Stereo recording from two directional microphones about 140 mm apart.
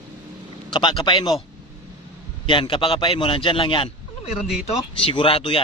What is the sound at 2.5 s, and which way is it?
A man's voice, 35° left (ahead or behind).